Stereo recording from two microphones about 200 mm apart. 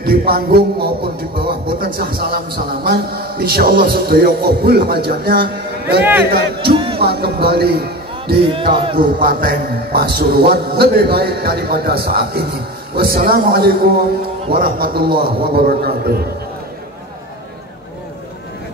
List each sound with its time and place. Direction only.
0.0 s music: 50° right (ahead or behind)
2.0 s music: 45° right (ahead or behind)
6.6 s a sound: 25° right (ahead or behind)
7.0 s a man's voice: 55° right (ahead or behind)
8.5 s speech: 25° right (ahead or behind)
8.9 s music: 45° right (ahead or behind)
15.0 s speech: 25° right (ahead or behind)
15.5 s music: 50° right (ahead or behind)